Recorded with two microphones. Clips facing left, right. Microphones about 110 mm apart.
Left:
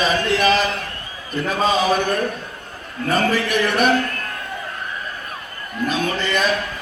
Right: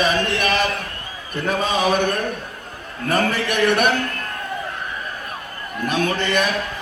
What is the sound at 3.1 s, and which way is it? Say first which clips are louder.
Speech: left 1 dB; 65° right (ahead or behind).